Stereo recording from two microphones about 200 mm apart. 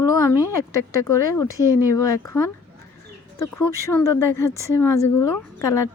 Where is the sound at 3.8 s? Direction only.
15° left (ahead or behind).